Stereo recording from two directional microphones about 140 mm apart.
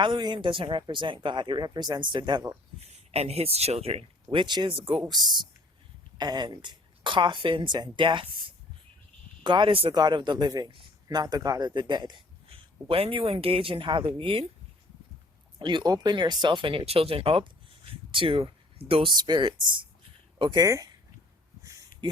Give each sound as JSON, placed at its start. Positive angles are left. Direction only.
{"t": 0.0, "sound": "speech", "side_deg": -30}
{"t": 2.8, "sound": "speech", "side_deg": -50}
{"t": 12.5, "sound": "speech", "side_deg": -40}
{"t": 15.5, "sound": "speech", "side_deg": -35}